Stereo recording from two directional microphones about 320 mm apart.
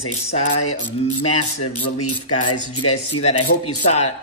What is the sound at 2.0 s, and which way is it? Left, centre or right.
Mechanisms, left.